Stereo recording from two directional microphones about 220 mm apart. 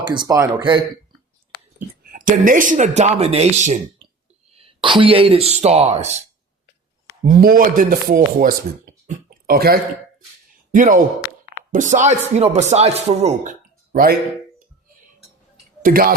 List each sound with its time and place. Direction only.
0.0 s speech: 20° right (ahead or behind)
2.0 s speech: 40° right (ahead or behind)
7.3 s speech: 40° right (ahead or behind)
15.8 s speech: 40° right (ahead or behind)